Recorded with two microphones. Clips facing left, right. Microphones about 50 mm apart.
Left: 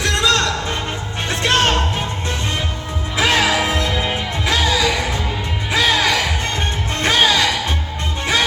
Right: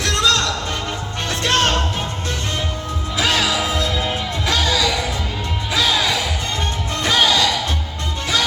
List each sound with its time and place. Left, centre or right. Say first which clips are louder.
0.0 s music: left 1 dB; left
3.2 s music: left 3 dB; left
5.7 s music: left 3 dB; left